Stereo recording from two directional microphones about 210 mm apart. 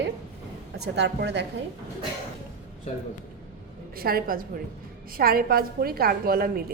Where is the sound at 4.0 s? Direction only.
45° right (ahead or behind).